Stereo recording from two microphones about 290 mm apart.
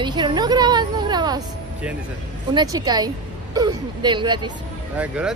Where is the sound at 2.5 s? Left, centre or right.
Centre.